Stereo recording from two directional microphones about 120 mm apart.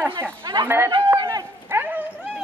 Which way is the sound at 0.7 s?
20° right (ahead or behind).